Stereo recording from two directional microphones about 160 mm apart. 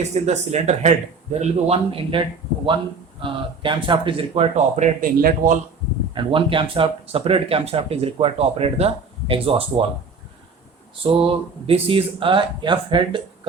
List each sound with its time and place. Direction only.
0.1 s speech: 45° right (ahead or behind)
6.1 s speech: 30° right (ahead or behind)
11.0 s speech: 35° right (ahead or behind)